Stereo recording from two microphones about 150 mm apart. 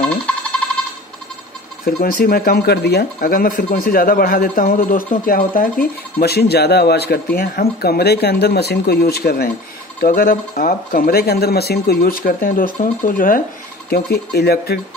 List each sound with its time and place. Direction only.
1.9 s speech: 80° left
9.9 s speech: 70° left (ahead or behind)
13.8 s speech: 90° left